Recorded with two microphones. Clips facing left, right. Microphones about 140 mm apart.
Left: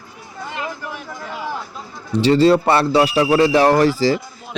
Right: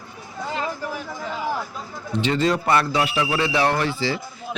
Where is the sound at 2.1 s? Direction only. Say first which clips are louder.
Left 8 dB; 35° left (ahead or behind).